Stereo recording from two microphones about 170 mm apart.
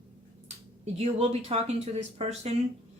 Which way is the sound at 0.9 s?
35° right (ahead or behind).